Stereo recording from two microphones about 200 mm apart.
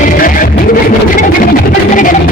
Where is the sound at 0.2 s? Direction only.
45° left (ahead or behind).